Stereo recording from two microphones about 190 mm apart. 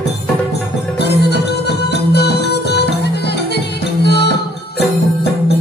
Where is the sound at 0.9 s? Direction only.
60° left (ahead or behind).